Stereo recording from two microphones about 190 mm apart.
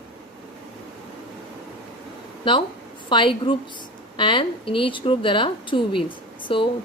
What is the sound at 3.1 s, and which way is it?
Speech, 25° left (ahead or behind).